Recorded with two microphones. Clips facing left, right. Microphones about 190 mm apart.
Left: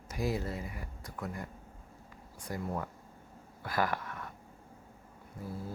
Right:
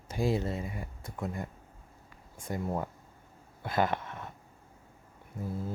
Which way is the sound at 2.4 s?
25° right (ahead or behind).